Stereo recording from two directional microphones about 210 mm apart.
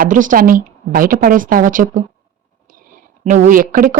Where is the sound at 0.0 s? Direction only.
40° right (ahead or behind).